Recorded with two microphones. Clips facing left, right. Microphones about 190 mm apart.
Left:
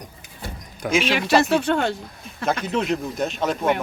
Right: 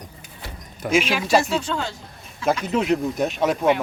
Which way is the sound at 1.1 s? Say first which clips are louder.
Left 2 dB; 65° left (ahead or behind).